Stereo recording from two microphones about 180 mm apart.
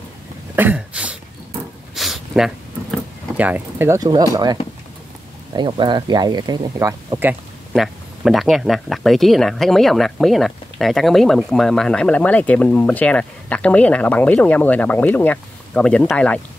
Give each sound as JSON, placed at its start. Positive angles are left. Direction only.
{"t": 0.6, "sound": "a sound", "side_deg": -10}
{"t": 3.3, "sound": "speech", "side_deg": -10}
{"t": 7.7, "sound": "speech", "side_deg": 0}